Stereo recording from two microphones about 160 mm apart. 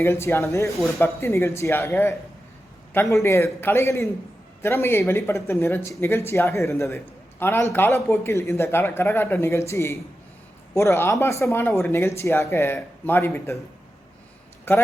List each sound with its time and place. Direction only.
0.0 s a man's voice: 15° left (ahead or behind)
14.7 s a man's voice: 15° left (ahead or behind)